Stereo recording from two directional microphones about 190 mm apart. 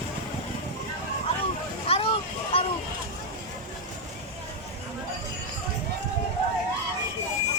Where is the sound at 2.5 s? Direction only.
30° left (ahead or behind).